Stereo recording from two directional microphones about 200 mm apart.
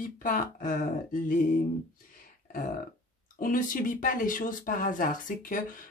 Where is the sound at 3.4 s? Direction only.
45° left (ahead or behind).